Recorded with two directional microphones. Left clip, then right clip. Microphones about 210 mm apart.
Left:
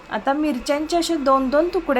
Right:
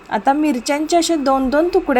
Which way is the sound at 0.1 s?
20° right (ahead or behind).